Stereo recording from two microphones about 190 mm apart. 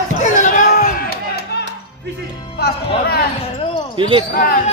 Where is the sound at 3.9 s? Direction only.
25° right (ahead or behind).